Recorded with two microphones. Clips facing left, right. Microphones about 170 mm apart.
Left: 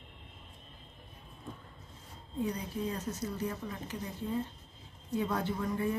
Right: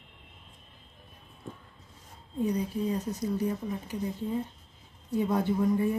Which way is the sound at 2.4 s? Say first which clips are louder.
Right 6 dB; 15° right (ahead or behind).